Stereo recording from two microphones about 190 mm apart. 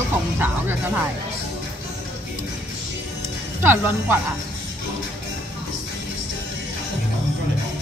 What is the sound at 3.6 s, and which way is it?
Speech, 10° right (ahead or behind).